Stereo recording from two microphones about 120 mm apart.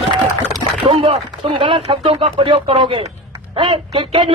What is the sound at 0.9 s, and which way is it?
A man's voice, 55° right (ahead or behind).